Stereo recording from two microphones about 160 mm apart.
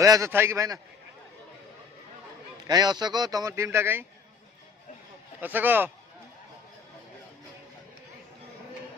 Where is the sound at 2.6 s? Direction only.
25° right (ahead or behind).